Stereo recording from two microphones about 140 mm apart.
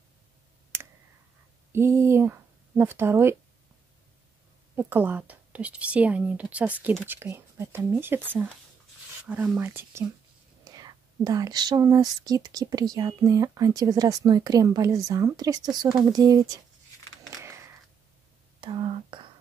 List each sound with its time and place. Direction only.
1.7 s speech: 20° right (ahead or behind)
4.7 s speech: 15° right (ahead or behind)
9.7 s speech: 20° right (ahead or behind)
17.4 s a sound: 20° right (ahead or behind)
18.6 s whispering: 35° right (ahead or behind)